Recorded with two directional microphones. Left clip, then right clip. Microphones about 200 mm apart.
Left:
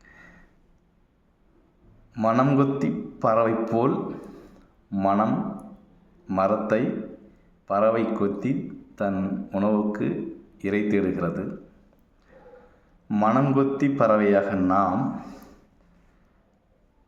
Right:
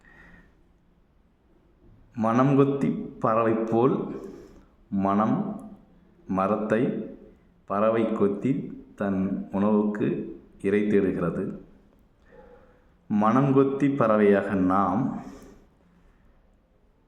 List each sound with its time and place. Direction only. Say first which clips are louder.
2.1 s a man's voice: left 1 dB; 10° right (ahead or behind)
13.1 s a man's voice: left 1 dB; 10° right (ahead or behind)
14.9 s a man's voice: left 1 dB; centre (ahead or behind)